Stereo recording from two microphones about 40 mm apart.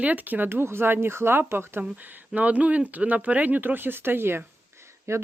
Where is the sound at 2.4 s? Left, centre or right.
Right.